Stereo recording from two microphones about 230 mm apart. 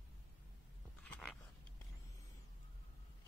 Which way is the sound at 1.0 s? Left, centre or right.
Centre.